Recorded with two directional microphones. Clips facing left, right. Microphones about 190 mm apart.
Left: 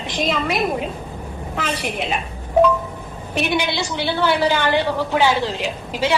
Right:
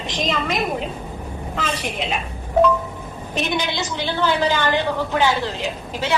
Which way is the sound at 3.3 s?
10° left (ahead or behind).